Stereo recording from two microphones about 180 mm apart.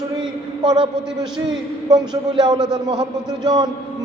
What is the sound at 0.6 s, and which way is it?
Speech, 25° right (ahead or behind).